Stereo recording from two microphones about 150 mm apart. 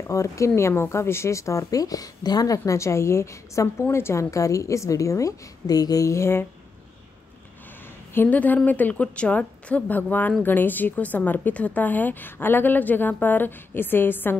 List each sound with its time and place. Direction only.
0.1 s a woman's voice: 20° left (ahead or behind)
8.1 s a woman's voice: 10° left (ahead or behind)